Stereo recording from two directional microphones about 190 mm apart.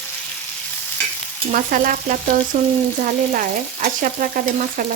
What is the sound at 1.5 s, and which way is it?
Frying, 45° right (ahead or behind).